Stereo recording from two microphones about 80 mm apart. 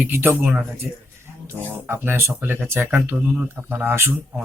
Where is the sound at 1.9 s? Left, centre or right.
Right.